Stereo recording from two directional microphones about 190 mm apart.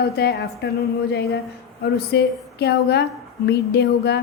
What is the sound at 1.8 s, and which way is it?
A woman's voice, 60° left (ahead or behind).